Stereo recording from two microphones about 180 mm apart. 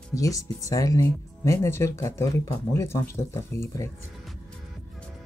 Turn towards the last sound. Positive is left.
turn(degrees=15)  # may be behind; listen again after turning